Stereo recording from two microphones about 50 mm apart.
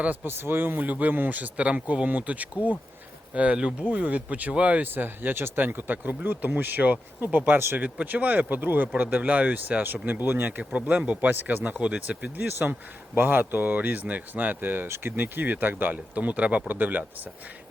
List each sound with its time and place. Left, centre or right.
0.3 s speech: right
4.8 s speech: right
7.8 s speech: right
10.6 s speech: right
11.3 s speech: right
13.1 s speech: right
14.8 s speech: right
15.1 s speech: right